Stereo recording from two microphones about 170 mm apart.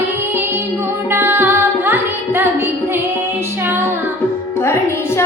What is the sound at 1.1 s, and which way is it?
Music, 15° right (ahead or behind).